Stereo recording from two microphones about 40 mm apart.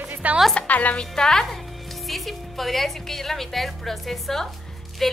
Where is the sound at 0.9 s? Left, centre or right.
Centre.